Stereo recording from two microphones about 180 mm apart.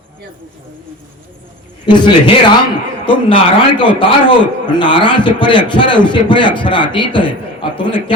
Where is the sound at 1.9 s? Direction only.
25° left (ahead or behind).